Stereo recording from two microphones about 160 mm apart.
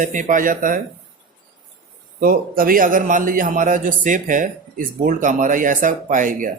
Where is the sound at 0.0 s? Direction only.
55° right (ahead or behind).